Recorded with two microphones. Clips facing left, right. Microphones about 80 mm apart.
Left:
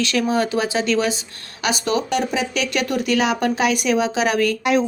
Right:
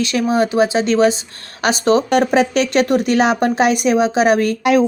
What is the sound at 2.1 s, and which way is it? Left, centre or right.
Speech, right.